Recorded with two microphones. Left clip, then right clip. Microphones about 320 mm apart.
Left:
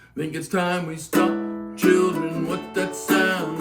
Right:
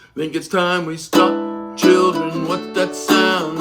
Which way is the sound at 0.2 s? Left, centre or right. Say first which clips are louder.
Right 6 dB; centre.